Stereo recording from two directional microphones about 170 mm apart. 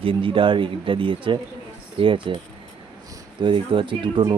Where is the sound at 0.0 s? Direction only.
30° right (ahead or behind).